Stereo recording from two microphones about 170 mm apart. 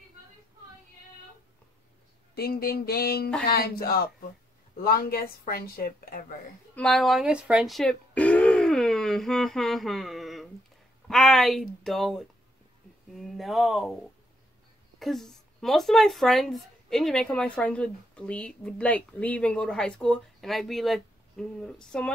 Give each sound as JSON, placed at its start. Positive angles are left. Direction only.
{"t": 2.3, "sound": "speech", "side_deg": 65}
{"t": 6.7, "sound": "a sound", "side_deg": 5}
{"t": 11.1, "sound": "speech", "side_deg": 0}
{"t": 15.0, "sound": "speech", "side_deg": 0}